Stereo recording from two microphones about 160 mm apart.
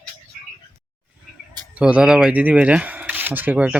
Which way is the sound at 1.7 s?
5° right (ahead or behind).